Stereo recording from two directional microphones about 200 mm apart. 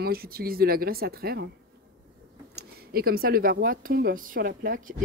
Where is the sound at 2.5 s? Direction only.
50° right (ahead or behind).